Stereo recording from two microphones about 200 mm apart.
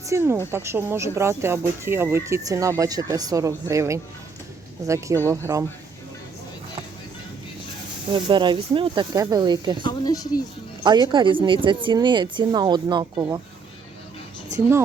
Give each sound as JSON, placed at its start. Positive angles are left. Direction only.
{"t": 0.0, "sound": "a woman's voice", "side_deg": -15}
{"t": 8.1, "sound": "a woman's voice", "side_deg": -25}
{"t": 9.8, "sound": "speech", "side_deg": 20}
{"t": 10.8, "sound": "a woman's voice", "side_deg": -20}